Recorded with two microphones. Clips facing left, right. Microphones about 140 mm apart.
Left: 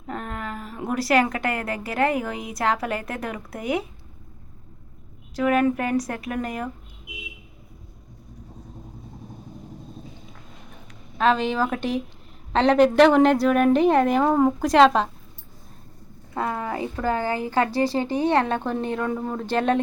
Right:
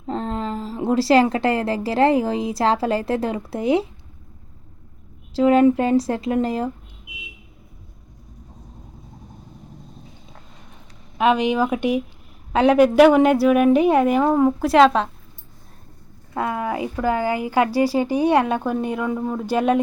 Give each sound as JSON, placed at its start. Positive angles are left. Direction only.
{"t": 0.1, "sound": "a woman's voice", "side_deg": -25}
{"t": 5.3, "sound": "a woman's voice", "side_deg": -25}
{"t": 11.2, "sound": "a woman's voice", "side_deg": -15}
{"t": 16.3, "sound": "a woman's voice", "side_deg": -5}